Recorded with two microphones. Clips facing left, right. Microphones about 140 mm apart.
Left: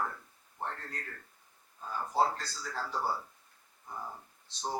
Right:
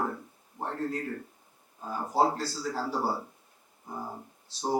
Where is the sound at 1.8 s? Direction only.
30° right (ahead or behind).